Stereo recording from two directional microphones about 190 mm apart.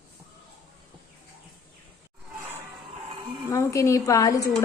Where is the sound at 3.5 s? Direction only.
15° left (ahead or behind).